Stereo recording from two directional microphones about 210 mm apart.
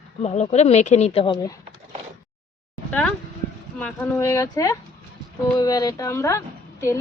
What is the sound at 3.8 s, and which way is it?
Speech, 10° left (ahead or behind).